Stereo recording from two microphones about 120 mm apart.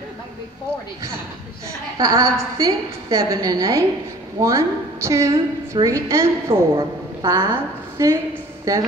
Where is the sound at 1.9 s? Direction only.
30° right (ahead or behind).